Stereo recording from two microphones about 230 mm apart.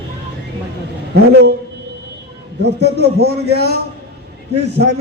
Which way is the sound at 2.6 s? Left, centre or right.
Right.